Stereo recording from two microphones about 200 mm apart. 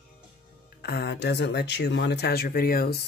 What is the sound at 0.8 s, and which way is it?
Speech, 55° left (ahead or behind).